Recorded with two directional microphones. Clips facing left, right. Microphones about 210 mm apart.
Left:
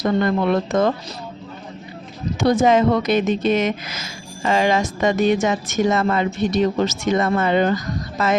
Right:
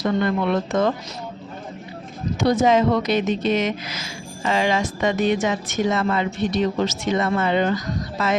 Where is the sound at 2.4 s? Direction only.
50° left (ahead or behind).